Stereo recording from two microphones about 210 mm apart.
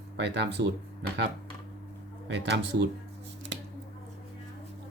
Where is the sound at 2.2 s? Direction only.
55° right (ahead or behind).